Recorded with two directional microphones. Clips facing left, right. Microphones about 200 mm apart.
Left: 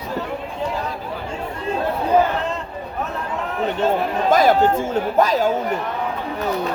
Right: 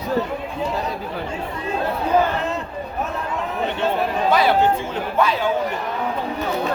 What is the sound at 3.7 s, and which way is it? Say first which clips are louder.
Speech: left 3 dB; 45° left (ahead or behind).